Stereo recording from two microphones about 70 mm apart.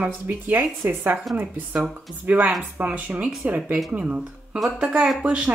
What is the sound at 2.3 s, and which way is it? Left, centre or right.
Speech, right.